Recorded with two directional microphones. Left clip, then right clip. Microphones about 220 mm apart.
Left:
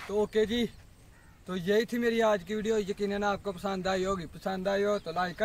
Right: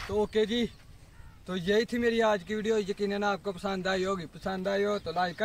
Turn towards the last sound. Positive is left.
turn(degrees=-10)  # may be behind; listen again after turning